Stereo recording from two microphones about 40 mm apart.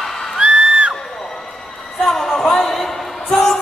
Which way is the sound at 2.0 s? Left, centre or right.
Centre.